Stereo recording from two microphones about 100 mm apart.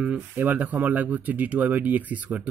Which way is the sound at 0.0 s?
15° right (ahead or behind).